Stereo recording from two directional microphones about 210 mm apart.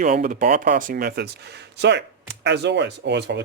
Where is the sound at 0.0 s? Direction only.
40° right (ahead or behind).